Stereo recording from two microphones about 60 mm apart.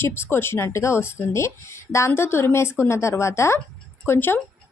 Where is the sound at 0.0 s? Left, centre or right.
Left.